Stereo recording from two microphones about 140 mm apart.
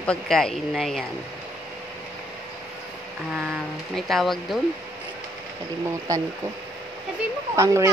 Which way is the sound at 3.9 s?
Centre (ahead or behind).